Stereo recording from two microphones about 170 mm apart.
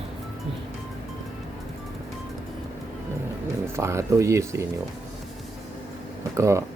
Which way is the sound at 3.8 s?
15° right (ahead or behind).